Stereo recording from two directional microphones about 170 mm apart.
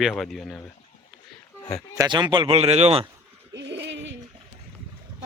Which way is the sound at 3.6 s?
90° right.